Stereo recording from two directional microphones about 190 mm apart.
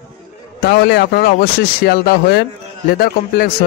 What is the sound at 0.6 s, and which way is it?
A man's voice, 60° left (ahead or behind).